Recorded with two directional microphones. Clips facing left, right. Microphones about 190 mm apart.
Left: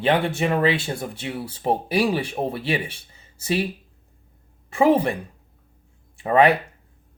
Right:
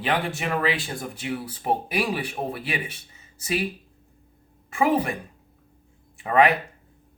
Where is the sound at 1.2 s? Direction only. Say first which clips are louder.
Left 2 dB; 30° left (ahead or behind).